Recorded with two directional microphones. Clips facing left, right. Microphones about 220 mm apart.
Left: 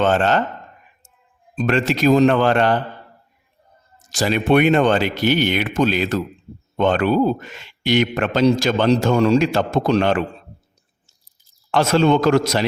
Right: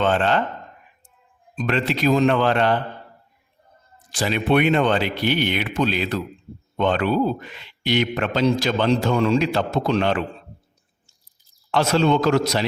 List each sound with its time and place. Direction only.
0.0 s a man's voice: 45° left (ahead or behind)
1.5 s a man's voice: 45° left (ahead or behind)
4.1 s a man's voice: 45° left (ahead or behind)
11.7 s a man's voice: 50° left (ahead or behind)